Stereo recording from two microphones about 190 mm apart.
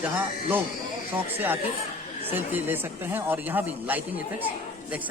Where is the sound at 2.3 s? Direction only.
10° right (ahead or behind).